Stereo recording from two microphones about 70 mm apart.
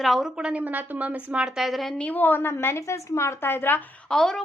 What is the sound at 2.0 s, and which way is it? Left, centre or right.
A woman's voice, left.